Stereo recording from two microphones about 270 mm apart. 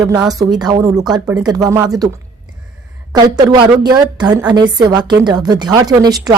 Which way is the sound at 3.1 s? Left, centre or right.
Centre.